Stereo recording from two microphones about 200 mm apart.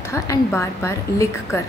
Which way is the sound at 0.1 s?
15° left (ahead or behind).